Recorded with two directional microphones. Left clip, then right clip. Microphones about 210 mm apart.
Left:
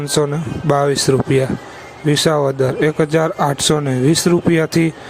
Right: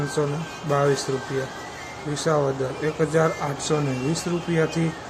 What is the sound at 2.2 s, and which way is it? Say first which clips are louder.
Speech: left 5 dB; 45° left (ahead or behind).